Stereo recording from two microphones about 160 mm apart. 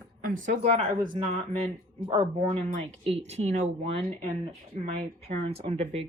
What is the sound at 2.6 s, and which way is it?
Speech, 40° right (ahead or behind).